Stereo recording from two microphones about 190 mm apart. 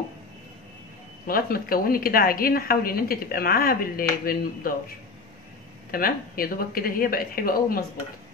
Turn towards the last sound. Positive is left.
turn(degrees=50)  # may be behind; listen again after turning